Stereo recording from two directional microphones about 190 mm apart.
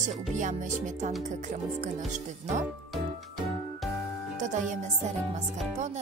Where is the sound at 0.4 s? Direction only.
40° right (ahead or behind).